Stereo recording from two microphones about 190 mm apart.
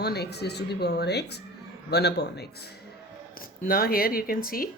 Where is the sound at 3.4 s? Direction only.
50° left (ahead or behind).